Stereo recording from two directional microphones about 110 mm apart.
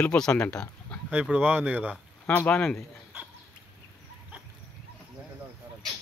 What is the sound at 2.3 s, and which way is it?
Speech, 20° left (ahead or behind).